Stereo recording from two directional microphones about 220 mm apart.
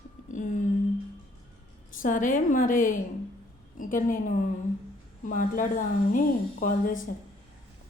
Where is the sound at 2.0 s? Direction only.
35° left (ahead or behind).